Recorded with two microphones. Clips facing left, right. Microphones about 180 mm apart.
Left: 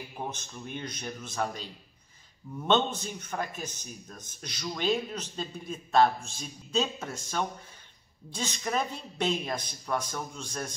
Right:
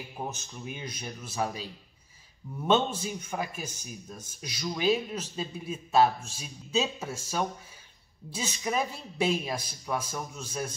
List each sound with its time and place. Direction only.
0.2 s a man's voice: 10° right (ahead or behind)